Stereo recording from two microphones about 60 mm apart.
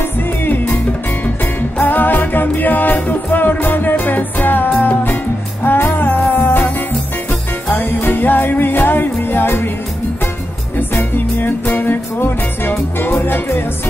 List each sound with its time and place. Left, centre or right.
1.8 s music: left
7.7 s music: left
10.8 s music: left